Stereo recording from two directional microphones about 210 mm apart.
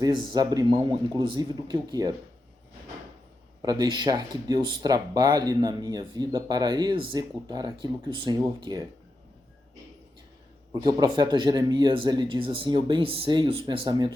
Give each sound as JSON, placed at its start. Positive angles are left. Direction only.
{"t": 0.0, "sound": "speech", "side_deg": -20}
{"t": 3.6, "sound": "speech", "side_deg": -20}
{"t": 10.8, "sound": "speech", "side_deg": -20}